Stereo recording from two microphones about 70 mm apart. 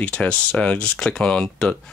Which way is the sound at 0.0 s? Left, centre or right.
Centre.